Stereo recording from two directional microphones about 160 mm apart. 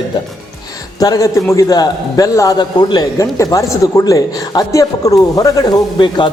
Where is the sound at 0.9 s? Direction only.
25° left (ahead or behind).